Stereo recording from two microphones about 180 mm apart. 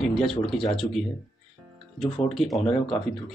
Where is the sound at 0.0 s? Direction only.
Centre (ahead or behind).